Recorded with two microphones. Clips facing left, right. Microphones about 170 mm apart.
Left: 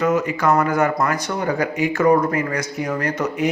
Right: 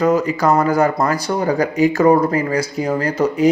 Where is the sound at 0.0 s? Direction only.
35° right (ahead or behind).